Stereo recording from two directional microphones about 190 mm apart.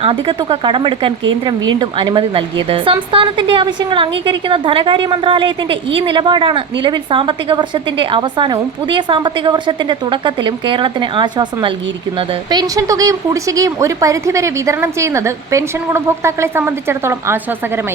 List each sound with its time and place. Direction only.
0.0 s a woman's voice: 30° right (ahead or behind); by 17.4 s 15° right (ahead or behind)